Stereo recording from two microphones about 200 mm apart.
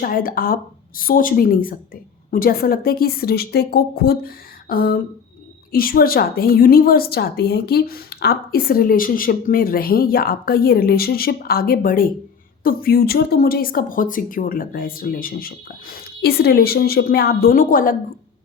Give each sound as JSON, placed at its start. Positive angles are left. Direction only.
{"t": 0.0, "sound": "a woman's voice", "side_deg": 45}